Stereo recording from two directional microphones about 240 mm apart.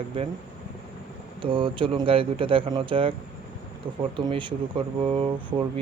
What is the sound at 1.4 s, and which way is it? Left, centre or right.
Speech, right.